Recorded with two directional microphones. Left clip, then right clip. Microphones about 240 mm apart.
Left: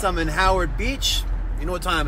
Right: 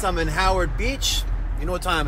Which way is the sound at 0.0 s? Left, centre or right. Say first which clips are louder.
Left 1 dB; centre.